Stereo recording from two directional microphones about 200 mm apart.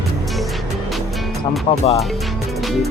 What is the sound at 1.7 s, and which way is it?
Music, 30° left (ahead or behind).